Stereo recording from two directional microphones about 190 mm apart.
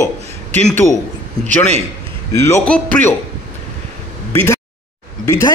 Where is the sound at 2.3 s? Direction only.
15° left (ahead or behind).